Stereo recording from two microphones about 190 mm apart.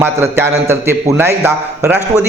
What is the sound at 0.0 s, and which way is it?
A man's voice, 10° right (ahead or behind).